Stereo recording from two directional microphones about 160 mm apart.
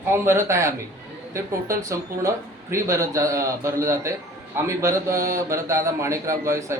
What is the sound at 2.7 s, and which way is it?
A man's voice, 20° right (ahead or behind).